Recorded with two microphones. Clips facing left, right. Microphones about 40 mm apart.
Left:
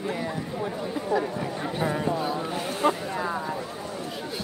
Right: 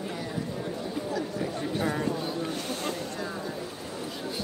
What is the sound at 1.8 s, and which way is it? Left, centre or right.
Speech, centre.